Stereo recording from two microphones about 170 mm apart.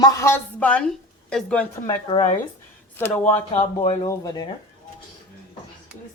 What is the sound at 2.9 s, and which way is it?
A woman's voice, 10° left (ahead or behind).